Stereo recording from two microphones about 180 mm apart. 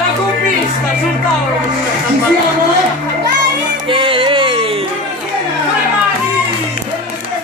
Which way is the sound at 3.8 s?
30° right (ahead or behind).